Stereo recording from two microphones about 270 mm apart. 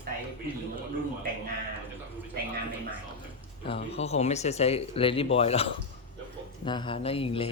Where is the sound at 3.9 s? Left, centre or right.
Left.